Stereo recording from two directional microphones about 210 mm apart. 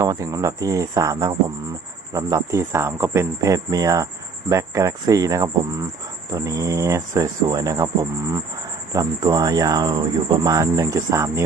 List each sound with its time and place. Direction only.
0.0 s speech: 15° right (ahead or behind)
8.9 s speech: 15° right (ahead or behind)